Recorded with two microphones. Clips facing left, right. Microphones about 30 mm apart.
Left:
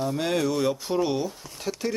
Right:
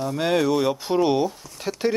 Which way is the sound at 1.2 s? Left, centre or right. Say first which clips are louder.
Right 3 dB; centre.